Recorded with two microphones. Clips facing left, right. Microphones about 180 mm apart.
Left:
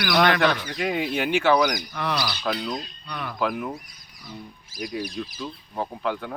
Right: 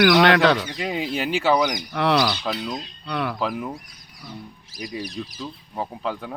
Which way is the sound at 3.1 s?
70° right (ahead or behind).